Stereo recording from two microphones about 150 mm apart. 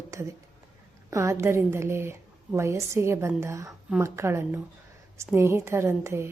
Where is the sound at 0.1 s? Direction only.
20° right (ahead or behind).